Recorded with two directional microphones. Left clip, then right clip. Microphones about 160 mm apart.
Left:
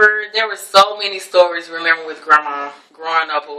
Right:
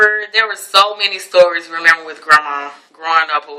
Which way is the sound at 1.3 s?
25° right (ahead or behind).